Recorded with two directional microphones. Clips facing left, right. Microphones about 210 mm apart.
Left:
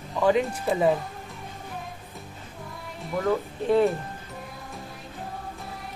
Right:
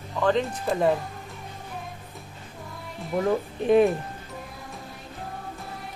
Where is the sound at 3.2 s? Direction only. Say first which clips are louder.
Right 1 dB; 15° right (ahead or behind).